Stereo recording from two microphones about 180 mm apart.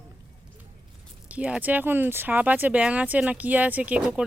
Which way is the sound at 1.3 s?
5° right (ahead or behind).